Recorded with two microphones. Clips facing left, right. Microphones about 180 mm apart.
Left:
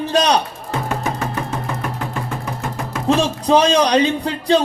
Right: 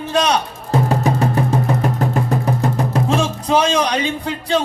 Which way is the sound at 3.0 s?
35° left (ahead or behind).